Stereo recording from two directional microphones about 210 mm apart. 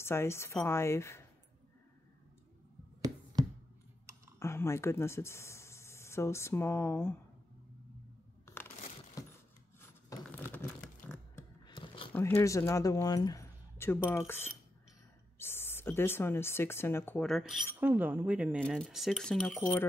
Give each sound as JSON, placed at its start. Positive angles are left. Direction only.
{"t": 0.0, "sound": "a woman's voice", "side_deg": 10}
{"t": 4.4, "sound": "speech", "side_deg": 10}
{"t": 9.2, "sound": "keys jangling", "side_deg": 15}
{"t": 9.8, "sound": "a sound", "side_deg": 15}
{"t": 11.6, "sound": "a sound", "side_deg": 25}
{"t": 12.1, "sound": "a woman's voice", "side_deg": 10}